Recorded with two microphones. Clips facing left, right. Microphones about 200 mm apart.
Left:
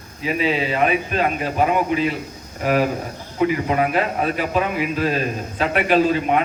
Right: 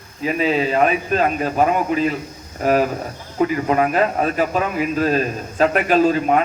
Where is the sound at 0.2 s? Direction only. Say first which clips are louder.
Right 2 dB; 45° right (ahead or behind).